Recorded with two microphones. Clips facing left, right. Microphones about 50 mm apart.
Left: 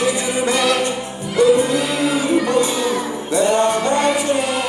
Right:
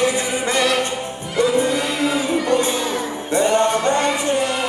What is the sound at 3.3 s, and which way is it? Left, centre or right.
Music, right.